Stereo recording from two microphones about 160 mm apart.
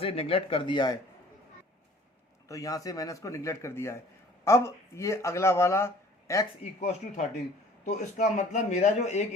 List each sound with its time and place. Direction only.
0.0 s speech: 35° left (ahead or behind)
2.5 s speech: 20° left (ahead or behind)
6.7 s speech: 45° left (ahead or behind)